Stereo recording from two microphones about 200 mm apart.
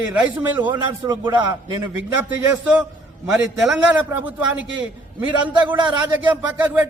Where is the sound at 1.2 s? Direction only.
20° right (ahead or behind).